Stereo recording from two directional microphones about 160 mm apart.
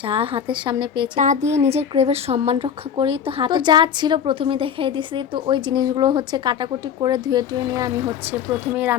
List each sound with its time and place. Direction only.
0.1 s speech: 35° right (ahead or behind)
1.2 s a woman's voice: 50° right (ahead or behind); by 7.9 s 25° right (ahead or behind)
8.3 s speech: 10° right (ahead or behind)